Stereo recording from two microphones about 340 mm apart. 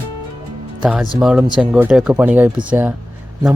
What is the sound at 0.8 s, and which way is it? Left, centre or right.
Speech, centre.